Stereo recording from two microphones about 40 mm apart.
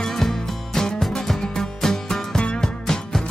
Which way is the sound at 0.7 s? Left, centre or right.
Centre.